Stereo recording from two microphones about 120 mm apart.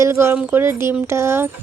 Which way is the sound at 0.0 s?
20° right (ahead or behind).